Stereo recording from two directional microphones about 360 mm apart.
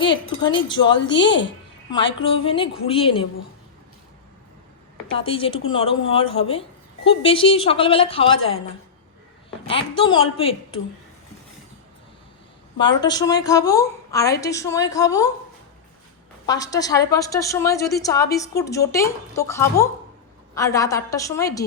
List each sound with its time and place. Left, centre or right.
0.0 s a woman's voice: centre
1.1 s speech: left
1.5 s a sound: centre
2.1 s a woman's voice: centre
5.1 s a woman's voice: centre
9.6 s a woman's voice: centre
12.8 s a woman's voice: centre
16.5 s a woman's voice: centre